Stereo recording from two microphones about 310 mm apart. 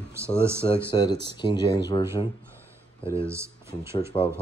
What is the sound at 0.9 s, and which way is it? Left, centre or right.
Speech, centre.